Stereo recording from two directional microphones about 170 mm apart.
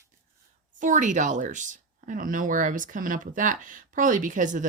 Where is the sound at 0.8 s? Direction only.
50° right (ahead or behind).